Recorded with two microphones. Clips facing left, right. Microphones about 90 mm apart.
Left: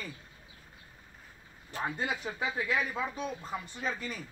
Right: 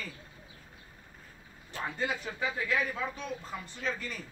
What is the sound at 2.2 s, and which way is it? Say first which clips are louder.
Speech: even; 15° left (ahead or behind).